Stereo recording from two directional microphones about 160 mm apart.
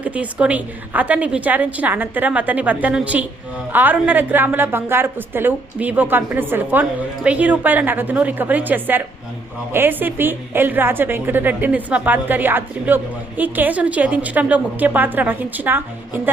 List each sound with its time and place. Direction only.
0.0 s a woman's voice: 10° right (ahead or behind)